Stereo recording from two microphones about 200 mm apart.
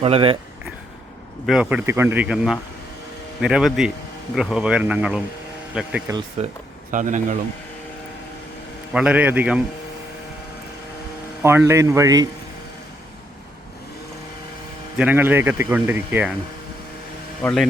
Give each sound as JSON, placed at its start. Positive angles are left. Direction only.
{"t": 0.0, "sound": "speech", "side_deg": -30}
{"t": 1.5, "sound": "speech", "side_deg": -5}
{"t": 6.4, "sound": "a man's voice", "side_deg": -30}
{"t": 8.9, "sound": "speech", "side_deg": -5}
{"t": 11.4, "sound": "speech", "side_deg": -15}
{"t": 14.9, "sound": "speech", "side_deg": -10}
{"t": 17.4, "sound": "speech", "side_deg": 5}